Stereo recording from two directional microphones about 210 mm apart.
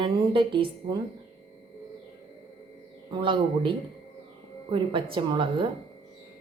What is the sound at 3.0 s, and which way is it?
Speech, 20° right (ahead or behind).